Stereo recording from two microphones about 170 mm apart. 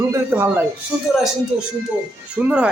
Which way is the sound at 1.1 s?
Centre (ahead or behind).